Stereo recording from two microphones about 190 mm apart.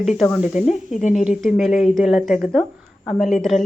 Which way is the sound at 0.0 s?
Centre (ahead or behind).